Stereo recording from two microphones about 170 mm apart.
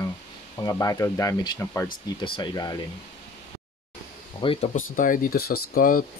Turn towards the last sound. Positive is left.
turn(degrees=55)  # may be behind; listen again after turning